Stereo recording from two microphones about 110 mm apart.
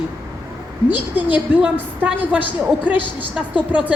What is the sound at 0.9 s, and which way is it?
A woman's voice, 15° right (ahead or behind).